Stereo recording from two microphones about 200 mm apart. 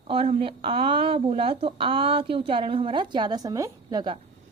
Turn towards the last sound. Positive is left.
turn(degrees=-20)  # may be behind; listen again after turning